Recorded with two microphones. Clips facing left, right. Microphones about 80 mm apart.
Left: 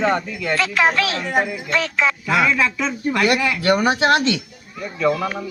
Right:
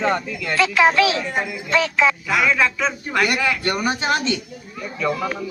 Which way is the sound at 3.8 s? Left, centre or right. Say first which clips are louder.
Left 4 dB; left.